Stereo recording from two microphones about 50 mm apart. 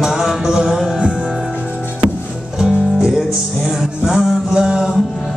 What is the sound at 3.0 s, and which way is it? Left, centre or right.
Music, centre.